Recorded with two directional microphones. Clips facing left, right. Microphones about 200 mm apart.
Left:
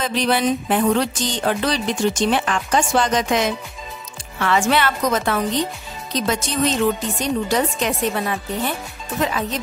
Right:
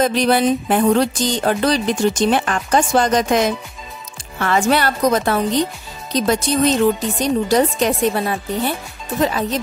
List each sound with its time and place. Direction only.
0.0 s music: 45° right (ahead or behind)